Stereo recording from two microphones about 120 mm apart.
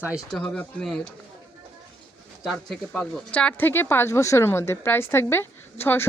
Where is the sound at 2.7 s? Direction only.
5° left (ahead or behind).